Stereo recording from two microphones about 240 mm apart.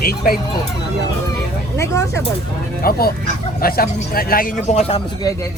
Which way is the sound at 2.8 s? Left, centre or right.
Left.